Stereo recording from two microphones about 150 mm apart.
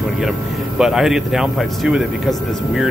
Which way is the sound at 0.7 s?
5° right (ahead or behind).